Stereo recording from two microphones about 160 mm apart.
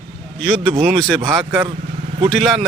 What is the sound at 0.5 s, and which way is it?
Speech, 35° right (ahead or behind).